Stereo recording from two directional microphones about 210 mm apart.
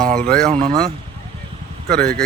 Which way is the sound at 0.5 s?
25° right (ahead or behind).